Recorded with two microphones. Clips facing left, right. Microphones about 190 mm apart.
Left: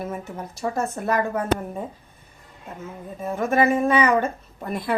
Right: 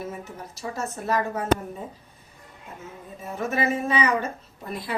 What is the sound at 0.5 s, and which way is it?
Speech, 55° left (ahead or behind).